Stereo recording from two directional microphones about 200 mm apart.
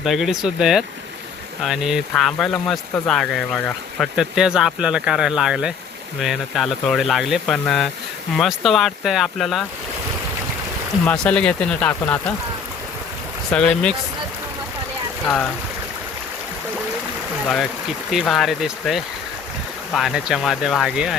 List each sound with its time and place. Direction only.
0.0 s speech: centre (ahead or behind)
11.0 s speech: 5° left (ahead or behind)
13.5 s speech: 5° left (ahead or behind)
18.1 s speech: centre (ahead or behind)